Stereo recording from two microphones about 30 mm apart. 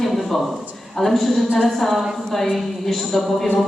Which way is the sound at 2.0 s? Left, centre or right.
Centre.